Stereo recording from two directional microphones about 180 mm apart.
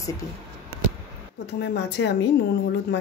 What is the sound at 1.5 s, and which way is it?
Speech, 75° left (ahead or behind).